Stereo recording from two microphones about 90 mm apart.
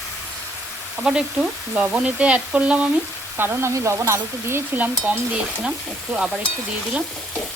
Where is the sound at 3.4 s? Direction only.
30° right (ahead or behind).